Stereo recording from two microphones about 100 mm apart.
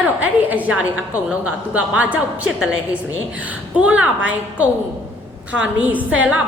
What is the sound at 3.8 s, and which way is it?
A woman's voice, 15° right (ahead or behind).